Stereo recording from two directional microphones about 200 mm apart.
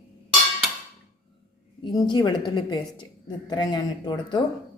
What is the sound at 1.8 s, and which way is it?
Speech, 20° left (ahead or behind).